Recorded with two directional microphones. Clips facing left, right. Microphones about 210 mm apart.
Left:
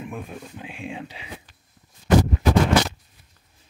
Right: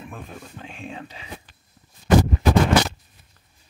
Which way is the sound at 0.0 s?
10° left (ahead or behind).